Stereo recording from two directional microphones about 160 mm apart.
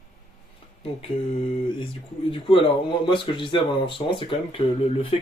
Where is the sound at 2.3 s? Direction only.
35° left (ahead or behind).